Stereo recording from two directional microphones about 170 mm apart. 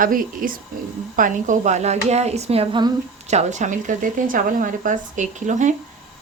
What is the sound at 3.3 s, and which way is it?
A woman's voice, 45° right (ahead or behind).